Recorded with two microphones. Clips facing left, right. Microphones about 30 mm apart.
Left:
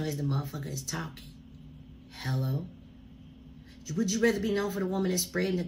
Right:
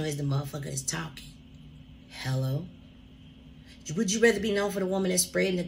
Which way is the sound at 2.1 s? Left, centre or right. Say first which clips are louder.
Right 1 dB; right.